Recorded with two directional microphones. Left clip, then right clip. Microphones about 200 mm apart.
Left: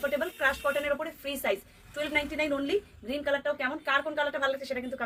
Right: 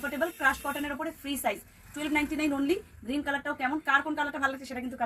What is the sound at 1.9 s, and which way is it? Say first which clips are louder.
A woman's voice: even; 20° left (ahead or behind).